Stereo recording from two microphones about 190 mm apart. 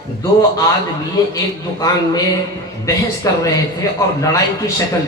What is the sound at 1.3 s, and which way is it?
A man's voice, 20° left (ahead or behind).